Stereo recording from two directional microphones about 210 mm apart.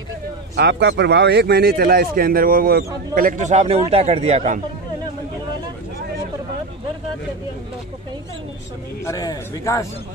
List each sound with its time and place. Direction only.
0.6 s a man's voice: 55° right (ahead or behind); by 4.6 s 30° right (ahead or behind)
9.0 s speech: 15° left (ahead or behind)